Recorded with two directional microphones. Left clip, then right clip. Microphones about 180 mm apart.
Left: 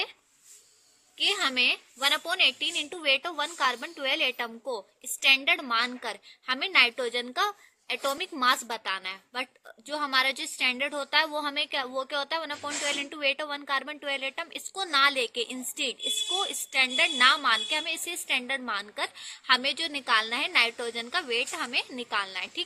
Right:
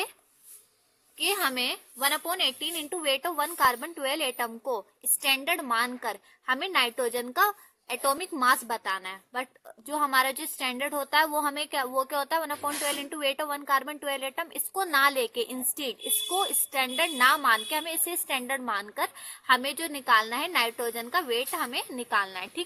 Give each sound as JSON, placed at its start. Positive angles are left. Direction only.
{"t": 1.2, "sound": "a woman's voice", "side_deg": -50}